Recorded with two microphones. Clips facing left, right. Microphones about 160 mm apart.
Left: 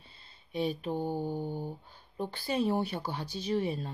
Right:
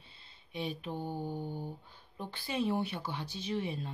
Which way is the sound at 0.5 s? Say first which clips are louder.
Left 6 dB; 40° left (ahead or behind).